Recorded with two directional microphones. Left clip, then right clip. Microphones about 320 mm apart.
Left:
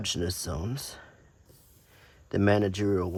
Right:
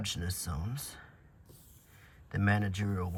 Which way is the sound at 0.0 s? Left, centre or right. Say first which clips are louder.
Left 7 dB; centre.